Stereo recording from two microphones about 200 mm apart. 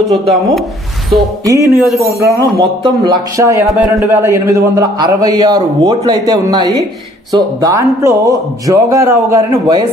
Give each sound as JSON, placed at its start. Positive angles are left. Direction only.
{"t": 0.1, "sound": "speech", "side_deg": 0}
{"t": 1.4, "sound": "speech", "side_deg": -15}